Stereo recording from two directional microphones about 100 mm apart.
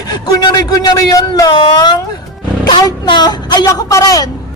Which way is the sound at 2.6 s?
45° left (ahead or behind).